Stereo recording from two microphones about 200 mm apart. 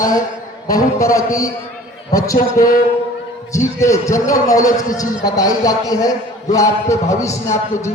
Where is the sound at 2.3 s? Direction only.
45° left (ahead or behind).